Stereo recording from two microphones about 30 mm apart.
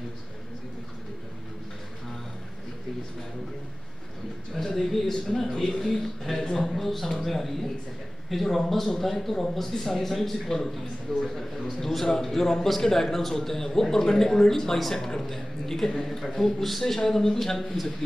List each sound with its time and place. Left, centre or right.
4.6 s a man's voice: centre